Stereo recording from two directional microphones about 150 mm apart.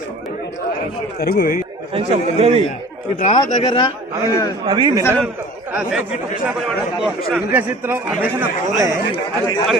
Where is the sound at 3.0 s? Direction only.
50° left (ahead or behind).